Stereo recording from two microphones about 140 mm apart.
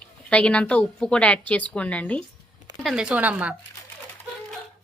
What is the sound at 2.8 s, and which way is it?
Speech, 5° right (ahead or behind).